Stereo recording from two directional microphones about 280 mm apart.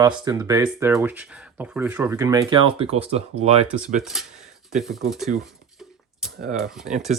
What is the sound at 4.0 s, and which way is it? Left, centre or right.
Speech, centre.